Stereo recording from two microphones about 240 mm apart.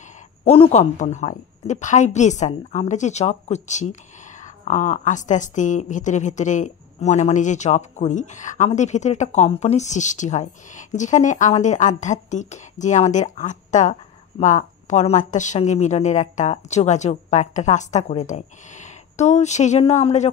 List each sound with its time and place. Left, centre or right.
0.5 s a woman's voice: left